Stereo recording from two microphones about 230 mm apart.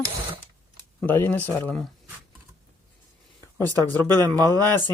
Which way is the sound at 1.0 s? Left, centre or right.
Centre.